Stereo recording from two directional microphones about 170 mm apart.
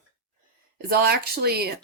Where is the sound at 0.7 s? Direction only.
65° right (ahead or behind).